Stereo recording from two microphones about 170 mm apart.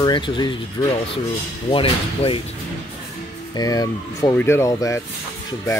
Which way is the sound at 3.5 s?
20° left (ahead or behind).